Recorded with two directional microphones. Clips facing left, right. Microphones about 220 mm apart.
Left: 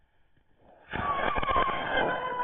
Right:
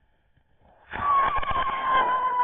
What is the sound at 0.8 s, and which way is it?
Vehicle, 30° left (ahead or behind).